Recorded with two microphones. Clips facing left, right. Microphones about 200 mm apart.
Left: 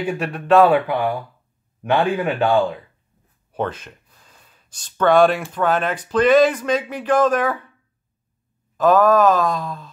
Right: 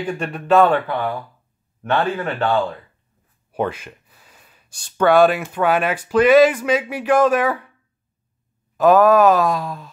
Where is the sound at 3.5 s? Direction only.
10° right (ahead or behind).